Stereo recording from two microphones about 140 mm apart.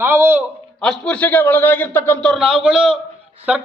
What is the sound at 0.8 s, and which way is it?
A man's voice, 5° left (ahead or behind).